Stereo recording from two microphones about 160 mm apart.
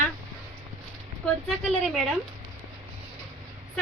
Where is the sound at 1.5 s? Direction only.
Centre (ahead or behind).